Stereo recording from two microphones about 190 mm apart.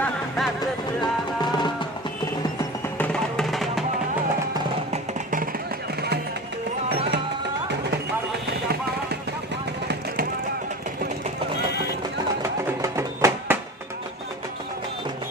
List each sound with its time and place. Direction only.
0.0 s music: centre (ahead or behind)
1.4 s music: 25° left (ahead or behind)
3.0 s music: 5° left (ahead or behind)
12.4 s a sound: 15° right (ahead or behind)